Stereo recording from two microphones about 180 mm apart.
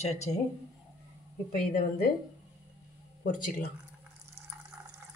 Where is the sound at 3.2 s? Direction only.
45° left (ahead or behind).